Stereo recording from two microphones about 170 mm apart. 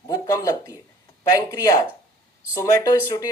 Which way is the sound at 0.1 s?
20° left (ahead or behind).